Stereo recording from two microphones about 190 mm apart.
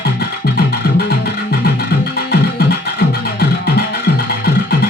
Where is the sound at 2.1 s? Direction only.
55° left (ahead or behind).